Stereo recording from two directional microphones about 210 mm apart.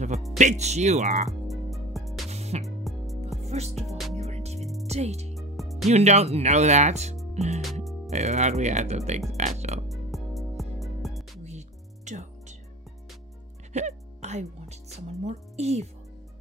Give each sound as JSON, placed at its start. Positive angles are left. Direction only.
{"t": 0.4, "sound": "speech", "side_deg": -35}
{"t": 1.5, "sound": "music", "side_deg": 0}
{"t": 2.2, "sound": "music", "side_deg": -30}
{"t": 2.8, "sound": "music", "side_deg": 0}
{"t": 3.4, "sound": "music", "side_deg": -30}
{"t": 4.8, "sound": "speech", "side_deg": -30}
{"t": 5.3, "sound": "music", "side_deg": 0}
{"t": 5.9, "sound": "speech", "side_deg": -30}
{"t": 7.3, "sound": "music", "side_deg": -30}
{"t": 8.1, "sound": "speech", "side_deg": -30}
{"t": 9.4, "sound": "music", "side_deg": -30}
{"t": 9.8, "sound": "music", "side_deg": 0}
{"t": 11.4, "sound": "music", "side_deg": -35}
{"t": 13.7, "sound": "music", "side_deg": -35}